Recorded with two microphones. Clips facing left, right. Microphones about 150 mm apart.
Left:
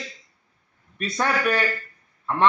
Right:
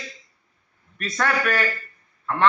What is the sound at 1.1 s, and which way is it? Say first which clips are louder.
Speech: even; 20° left (ahead or behind).